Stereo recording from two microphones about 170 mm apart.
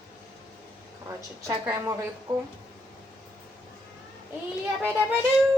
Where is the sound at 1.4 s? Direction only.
20° right (ahead or behind).